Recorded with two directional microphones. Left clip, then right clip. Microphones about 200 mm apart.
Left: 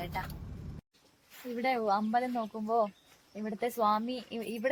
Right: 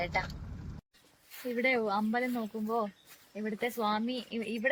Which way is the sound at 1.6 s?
25° left (ahead or behind).